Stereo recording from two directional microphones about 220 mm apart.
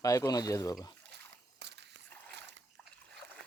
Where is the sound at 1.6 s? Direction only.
50° right (ahead or behind).